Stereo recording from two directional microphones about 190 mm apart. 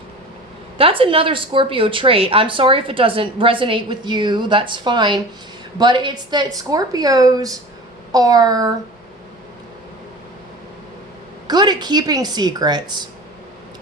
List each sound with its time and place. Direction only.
0.8 s speech: 30° right (ahead or behind)
11.4 s speech: 20° right (ahead or behind)